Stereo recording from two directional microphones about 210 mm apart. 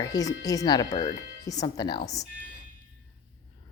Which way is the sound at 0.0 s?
15° left (ahead or behind).